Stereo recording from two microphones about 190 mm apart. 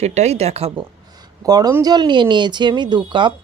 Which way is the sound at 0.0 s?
35° right (ahead or behind).